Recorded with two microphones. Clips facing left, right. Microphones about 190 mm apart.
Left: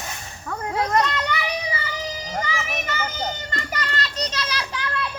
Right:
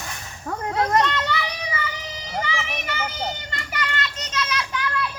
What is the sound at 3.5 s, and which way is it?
Children playing, 40° left (ahead or behind).